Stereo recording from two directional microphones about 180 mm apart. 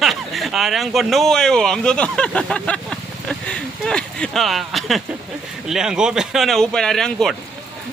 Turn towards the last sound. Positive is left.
turn(degrees=0)  # may be behind; listen again after turning